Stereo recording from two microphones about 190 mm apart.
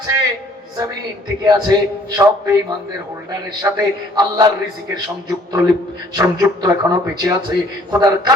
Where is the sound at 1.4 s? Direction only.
20° right (ahead or behind).